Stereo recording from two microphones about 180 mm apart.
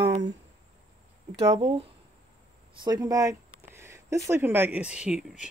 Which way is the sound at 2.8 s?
20° right (ahead or behind).